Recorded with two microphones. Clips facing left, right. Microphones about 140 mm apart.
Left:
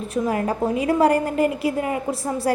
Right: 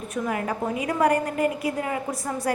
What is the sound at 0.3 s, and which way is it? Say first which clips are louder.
A woman's voice: left 4 dB; 30° left (ahead or behind).